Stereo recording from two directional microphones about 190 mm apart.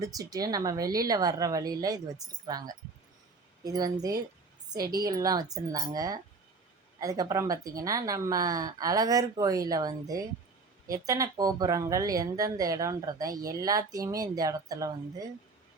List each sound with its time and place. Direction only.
0.0 s speech: 20° right (ahead or behind)